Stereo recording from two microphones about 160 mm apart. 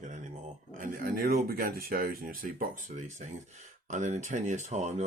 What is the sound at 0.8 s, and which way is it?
Speech, 65° right (ahead or behind).